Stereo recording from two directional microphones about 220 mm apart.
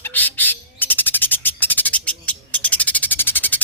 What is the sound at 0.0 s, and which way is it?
Bird, 10° left (ahead or behind).